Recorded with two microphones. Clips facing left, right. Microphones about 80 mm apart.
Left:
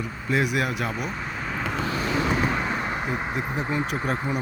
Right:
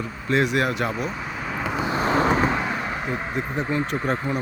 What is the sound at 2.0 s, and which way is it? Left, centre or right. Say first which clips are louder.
Vehicle: right 6 dB; right.